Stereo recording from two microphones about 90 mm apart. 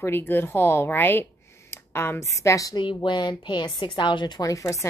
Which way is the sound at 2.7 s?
60° left (ahead or behind).